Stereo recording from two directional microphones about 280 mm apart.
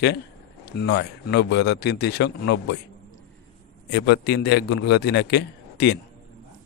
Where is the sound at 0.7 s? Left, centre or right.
Left.